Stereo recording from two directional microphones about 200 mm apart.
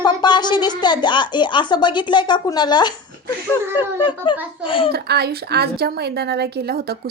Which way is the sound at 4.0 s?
25° left (ahead or behind).